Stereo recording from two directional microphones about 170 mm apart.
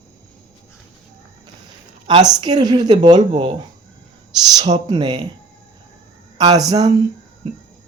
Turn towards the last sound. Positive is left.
turn(degrees=-20)  # may be behind; listen again after turning